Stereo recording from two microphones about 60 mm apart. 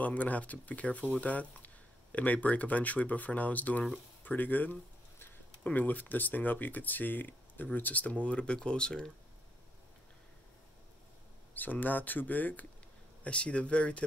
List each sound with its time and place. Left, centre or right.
0.0 s speech: left
11.5 s speech: left